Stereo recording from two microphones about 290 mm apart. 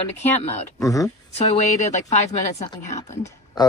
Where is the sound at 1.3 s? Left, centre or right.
Left.